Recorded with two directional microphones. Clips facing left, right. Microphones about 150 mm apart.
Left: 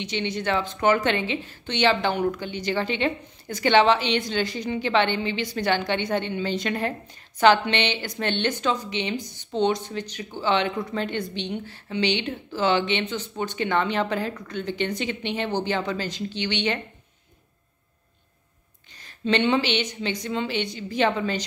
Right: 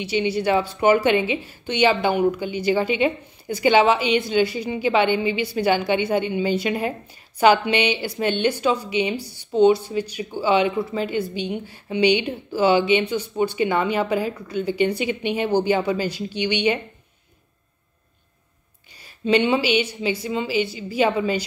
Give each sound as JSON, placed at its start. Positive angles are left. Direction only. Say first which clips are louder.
{"t": 0.0, "sound": "speech", "louder": "right 6 dB", "side_deg": -10}
{"t": 18.9, "sound": "speech", "louder": "right 4 dB", "side_deg": -10}